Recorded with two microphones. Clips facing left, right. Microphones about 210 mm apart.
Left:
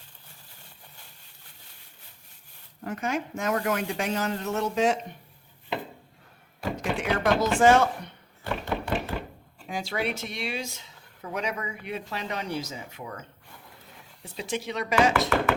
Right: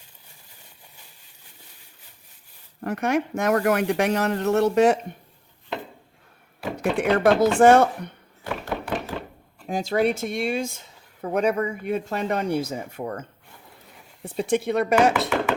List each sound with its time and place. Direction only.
2.8 s a woman's voice: 70° right (ahead or behind)
6.9 s speech: 60° right (ahead or behind)
8.4 s knock: 5° right (ahead or behind)
9.6 s speech: 45° right (ahead or behind)